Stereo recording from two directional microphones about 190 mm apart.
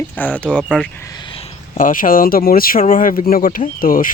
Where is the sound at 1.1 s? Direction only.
25° left (ahead or behind).